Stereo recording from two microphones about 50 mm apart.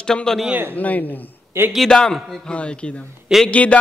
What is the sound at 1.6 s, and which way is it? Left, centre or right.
Speech, right.